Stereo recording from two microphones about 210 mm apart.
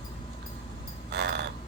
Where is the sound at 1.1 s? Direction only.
55° right (ahead or behind).